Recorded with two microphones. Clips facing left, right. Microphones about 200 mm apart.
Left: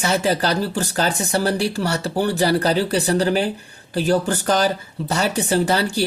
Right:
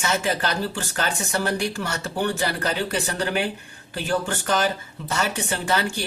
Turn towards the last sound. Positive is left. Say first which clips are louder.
# left 6 dB
turn(degrees=35)  # may be behind; listen again after turning